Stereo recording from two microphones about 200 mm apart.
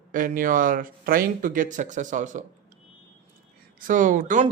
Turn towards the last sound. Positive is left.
turn(degrees=-40)  # may be behind; listen again after turning